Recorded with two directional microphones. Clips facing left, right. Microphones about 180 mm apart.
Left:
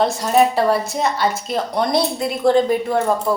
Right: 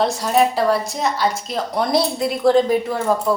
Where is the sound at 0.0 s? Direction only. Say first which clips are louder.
Left 1 dB; centre (ahead or behind).